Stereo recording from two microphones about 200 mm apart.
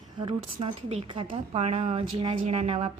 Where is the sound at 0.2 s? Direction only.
25° right (ahead or behind).